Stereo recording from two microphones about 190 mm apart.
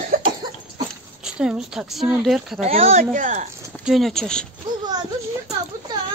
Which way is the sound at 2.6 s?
35° right (ahead or behind).